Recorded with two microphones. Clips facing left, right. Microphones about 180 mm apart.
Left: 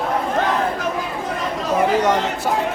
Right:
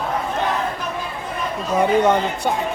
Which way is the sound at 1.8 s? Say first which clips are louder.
Right 3 dB; 85° left.